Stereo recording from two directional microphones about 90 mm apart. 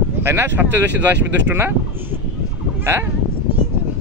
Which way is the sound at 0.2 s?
25° right (ahead or behind).